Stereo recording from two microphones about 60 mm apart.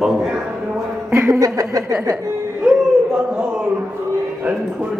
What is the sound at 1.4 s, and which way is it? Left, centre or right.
Speech, right.